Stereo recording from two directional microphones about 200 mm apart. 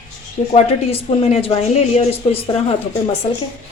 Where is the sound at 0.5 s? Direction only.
30° left (ahead or behind).